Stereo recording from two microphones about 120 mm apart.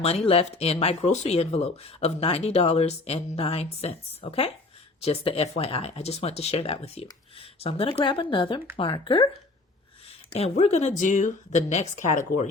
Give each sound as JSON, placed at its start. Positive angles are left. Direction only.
{"t": 0.0, "sound": "speech", "side_deg": 55}
{"t": 10.3, "sound": "speech", "side_deg": 60}